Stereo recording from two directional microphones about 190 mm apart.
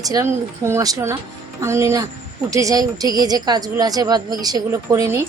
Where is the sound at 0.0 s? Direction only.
20° right (ahead or behind).